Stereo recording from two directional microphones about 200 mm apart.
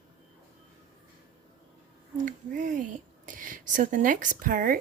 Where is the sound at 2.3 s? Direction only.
40° right (ahead or behind).